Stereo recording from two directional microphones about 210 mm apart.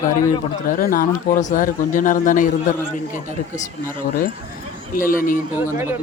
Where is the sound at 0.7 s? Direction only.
45° left (ahead or behind).